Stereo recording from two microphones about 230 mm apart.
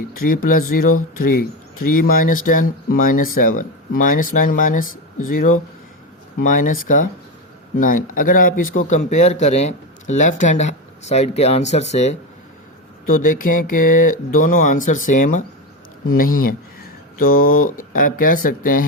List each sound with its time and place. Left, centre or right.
0.4 s speech: left
2.0 s speech: left